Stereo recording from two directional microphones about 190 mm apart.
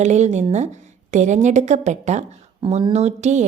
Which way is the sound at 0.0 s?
35° right (ahead or behind).